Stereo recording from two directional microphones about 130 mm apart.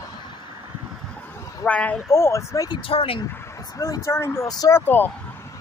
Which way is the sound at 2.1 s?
20° left (ahead or behind).